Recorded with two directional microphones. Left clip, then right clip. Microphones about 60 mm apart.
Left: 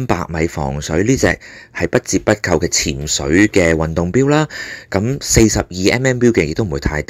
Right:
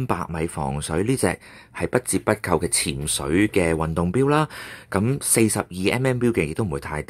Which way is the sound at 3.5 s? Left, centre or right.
Left.